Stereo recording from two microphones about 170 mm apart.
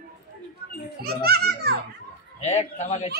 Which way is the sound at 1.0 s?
65° right (ahead or behind).